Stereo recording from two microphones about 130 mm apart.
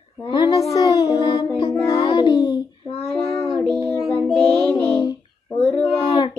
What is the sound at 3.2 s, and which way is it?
Child singing, 15° left (ahead or behind).